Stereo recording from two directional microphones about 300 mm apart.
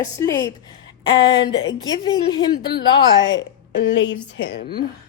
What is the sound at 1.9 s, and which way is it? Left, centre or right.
Speech, centre.